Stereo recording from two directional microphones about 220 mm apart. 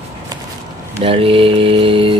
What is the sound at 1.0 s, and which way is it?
Mantra, 25° right (ahead or behind).